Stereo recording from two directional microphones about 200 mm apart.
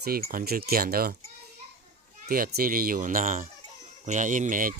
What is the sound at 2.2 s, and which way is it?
Speech, 50° right (ahead or behind).